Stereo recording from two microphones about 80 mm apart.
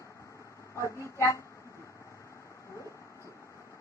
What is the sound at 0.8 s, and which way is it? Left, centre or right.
Speech, left.